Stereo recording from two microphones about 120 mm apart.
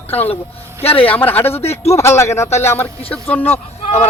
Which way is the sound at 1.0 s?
15° left (ahead or behind).